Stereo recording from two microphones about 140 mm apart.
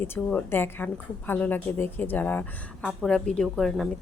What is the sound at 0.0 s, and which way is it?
A woman's voice, 15° left (ahead or behind).